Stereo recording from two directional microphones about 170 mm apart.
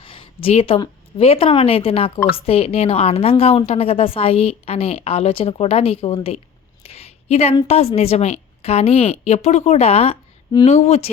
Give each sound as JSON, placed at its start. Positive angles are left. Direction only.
{"t": 0.0, "sound": "a woman's voice", "side_deg": 30}
{"t": 6.8, "sound": "a sound", "side_deg": 40}
{"t": 7.7, "sound": "a woman's voice", "side_deg": 35}